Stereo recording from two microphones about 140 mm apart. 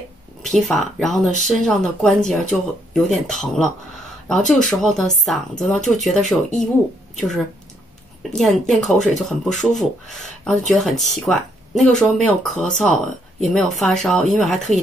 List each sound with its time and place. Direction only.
0.5 s speech: centre (ahead or behind)
8.2 s speech: centre (ahead or behind)